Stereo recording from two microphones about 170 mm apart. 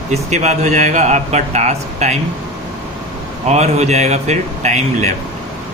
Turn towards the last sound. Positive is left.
turn(degrees=-40)  # may be behind; listen again after turning